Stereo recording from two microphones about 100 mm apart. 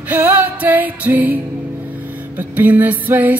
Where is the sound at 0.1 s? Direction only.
25° right (ahead or behind).